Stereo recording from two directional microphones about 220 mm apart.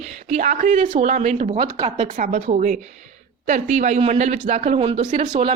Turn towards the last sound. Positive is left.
turn(degrees=-20)  # may be behind; listen again after turning